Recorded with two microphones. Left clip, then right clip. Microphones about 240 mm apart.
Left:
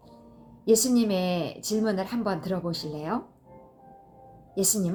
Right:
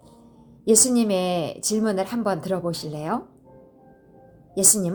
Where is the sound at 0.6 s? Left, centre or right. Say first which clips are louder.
Right 3 dB; right.